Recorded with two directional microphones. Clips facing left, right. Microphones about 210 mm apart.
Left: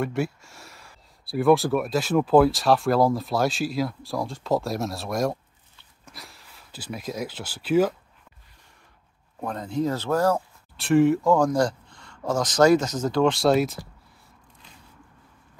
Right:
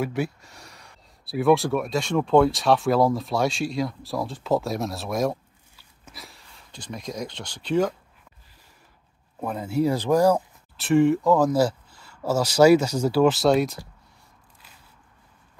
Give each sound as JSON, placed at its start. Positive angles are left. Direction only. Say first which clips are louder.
{"t": 0.0, "sound": "speech", "louder": "even", "side_deg": 0}
{"t": 9.4, "sound": "speech", "louder": "right 3 dB", "side_deg": -5}
{"t": 10.8, "sound": "speech", "louder": "even", "side_deg": 0}